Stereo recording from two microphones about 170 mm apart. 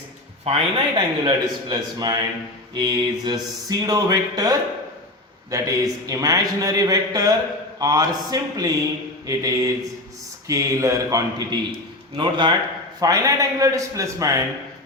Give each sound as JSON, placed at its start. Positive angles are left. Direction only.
{"t": 0.4, "sound": "a man's voice", "side_deg": -30}